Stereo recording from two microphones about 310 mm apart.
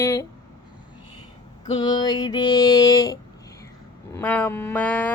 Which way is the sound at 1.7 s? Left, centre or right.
Centre.